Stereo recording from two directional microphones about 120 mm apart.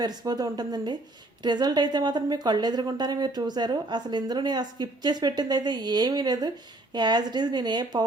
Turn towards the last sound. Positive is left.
turn(degrees=-35)  # may be behind; listen again after turning